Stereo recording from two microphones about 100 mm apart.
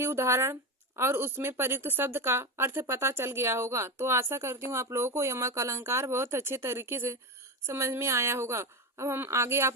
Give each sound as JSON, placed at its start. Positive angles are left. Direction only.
{"t": 0.0, "sound": "speech", "side_deg": -25}